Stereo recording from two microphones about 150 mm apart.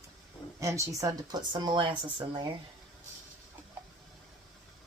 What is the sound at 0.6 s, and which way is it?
Speech, 20° right (ahead or behind).